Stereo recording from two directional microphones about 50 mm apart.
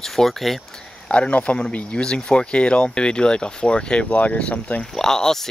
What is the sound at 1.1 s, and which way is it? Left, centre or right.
Speech, left.